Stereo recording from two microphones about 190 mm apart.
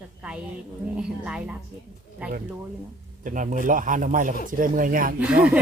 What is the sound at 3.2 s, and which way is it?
Speech, 45° right (ahead or behind).